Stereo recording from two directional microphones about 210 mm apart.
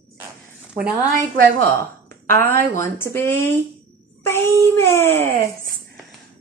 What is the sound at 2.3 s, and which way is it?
Speech, 10° left (ahead or behind).